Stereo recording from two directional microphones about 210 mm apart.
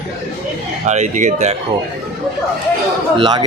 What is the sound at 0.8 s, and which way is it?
Speech, 35° right (ahead or behind).